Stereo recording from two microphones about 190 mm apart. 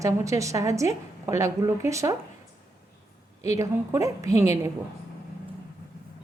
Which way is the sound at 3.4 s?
15° right (ahead or behind).